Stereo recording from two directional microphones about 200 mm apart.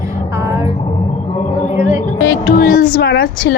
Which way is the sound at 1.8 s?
45° left (ahead or behind).